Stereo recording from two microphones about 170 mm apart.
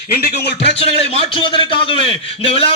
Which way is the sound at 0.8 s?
35° left (ahead or behind).